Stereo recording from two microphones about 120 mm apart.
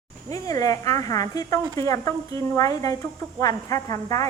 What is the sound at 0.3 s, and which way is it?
A woman's voice, 30° left (ahead or behind).